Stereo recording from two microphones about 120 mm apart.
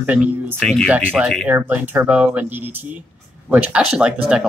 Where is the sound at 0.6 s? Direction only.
5° left (ahead or behind).